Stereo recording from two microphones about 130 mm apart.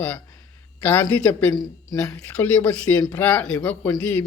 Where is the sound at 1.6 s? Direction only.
25° left (ahead or behind).